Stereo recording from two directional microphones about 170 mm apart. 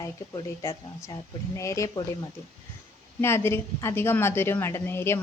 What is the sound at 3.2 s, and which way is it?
A woman's voice, 15° left (ahead or behind).